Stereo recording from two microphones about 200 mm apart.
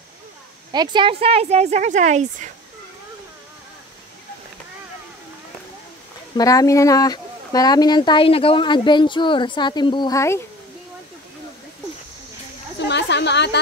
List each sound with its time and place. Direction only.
0.7 s speech: 20° right (ahead or behind)
6.3 s speech: 15° left (ahead or behind)
12.7 s a sound: 60° left (ahead or behind)